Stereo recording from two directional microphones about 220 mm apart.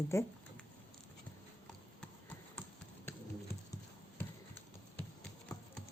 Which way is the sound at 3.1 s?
10° left (ahead or behind).